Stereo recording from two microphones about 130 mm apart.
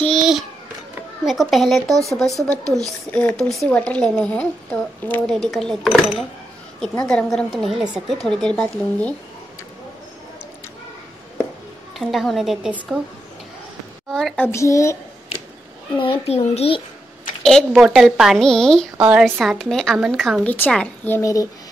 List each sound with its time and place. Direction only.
0.1 s babbling: 5° right (ahead or behind)
1.2 s speech: centre (ahead or behind)
3.1 s speech: 10° left (ahead or behind)
12.0 s speech: centre (ahead or behind)
14.1 s a child's voice: 10° left (ahead or behind)
16.0 s a child's voice: 50° left (ahead or behind)
17.4 s speech: 5° left (ahead or behind)
18.9 s a woman's voice: 10° right (ahead or behind)
19.6 s speech: 5° left (ahead or behind)
20.4 s speech: 15° left (ahead or behind)
21.2 s a child's voice: 25° left (ahead or behind)